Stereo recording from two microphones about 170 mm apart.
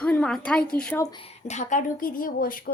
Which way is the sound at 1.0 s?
30° left (ahead or behind).